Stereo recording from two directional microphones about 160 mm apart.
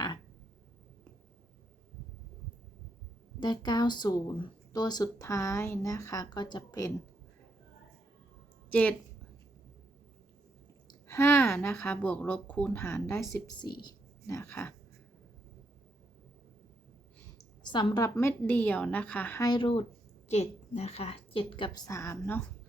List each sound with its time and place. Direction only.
3.4 s speech: 25° left (ahead or behind)
8.7 s a woman's voice: 10° left (ahead or behind)
10.8 s a woman's voice: 15° left (ahead or behind)
13.6 s speech: 30° left (ahead or behind)
17.3 s a woman's voice: 25° left (ahead or behind); by 19.5 s 10° left (ahead or behind)
19.5 s a woman's voice: 30° left (ahead or behind)
20.2 s a woman's voice: 45° left (ahead or behind); by 22.4 s 15° left (ahead or behind)